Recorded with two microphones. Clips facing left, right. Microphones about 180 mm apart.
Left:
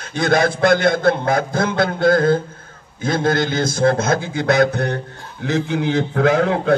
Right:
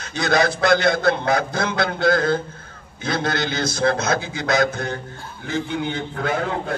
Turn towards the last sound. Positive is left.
turn(degrees=80)